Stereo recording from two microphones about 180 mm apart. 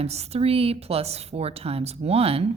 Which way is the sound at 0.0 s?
35° right (ahead or behind).